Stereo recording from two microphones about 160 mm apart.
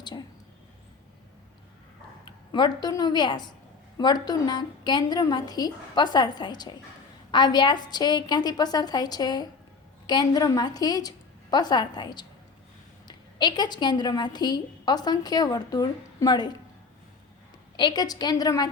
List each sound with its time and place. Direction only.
2.5 s a woman's voice: 25° left (ahead or behind)
17.7 s a woman's voice: 25° left (ahead or behind)